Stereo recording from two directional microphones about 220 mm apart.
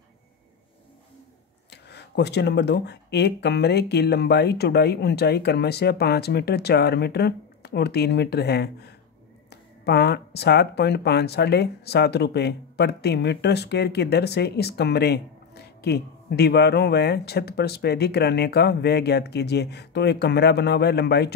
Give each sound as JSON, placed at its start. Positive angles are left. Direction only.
{"t": 1.7, "sound": "speech", "side_deg": 50}